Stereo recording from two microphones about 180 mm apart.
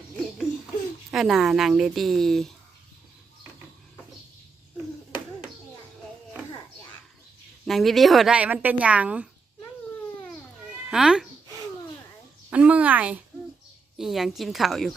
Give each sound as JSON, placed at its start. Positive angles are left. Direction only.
{"t": 1.1, "sound": "speech", "side_deg": 0}
{"t": 7.6, "sound": "speech", "side_deg": 0}
{"t": 10.8, "sound": "speech", "side_deg": -5}
{"t": 12.5, "sound": "speech", "side_deg": -5}